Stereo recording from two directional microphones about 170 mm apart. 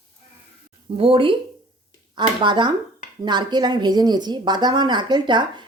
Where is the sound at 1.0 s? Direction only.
30° right (ahead or behind).